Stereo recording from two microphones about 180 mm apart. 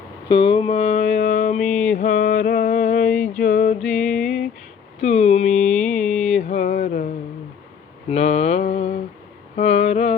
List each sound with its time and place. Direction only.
0.3 s mantra: 25° left (ahead or behind); by 1.5 s 45° left (ahead or behind)
1.5 s music: 5° left (ahead or behind)
1.9 s mantra: 45° left (ahead or behind)
3.8 s music: 5° left (ahead or behind)
4.9 s a sound: 35° left (ahead or behind)
5.8 s music: 5° left (ahead or behind)
6.2 s mantra: 40° left (ahead or behind)
9.6 s a sound: 40° left (ahead or behind)